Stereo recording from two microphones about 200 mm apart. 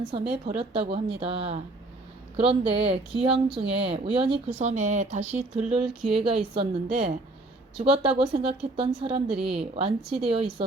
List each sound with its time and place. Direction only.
0.1 s speech: 30° right (ahead or behind)
7.8 s speech: 25° right (ahead or behind)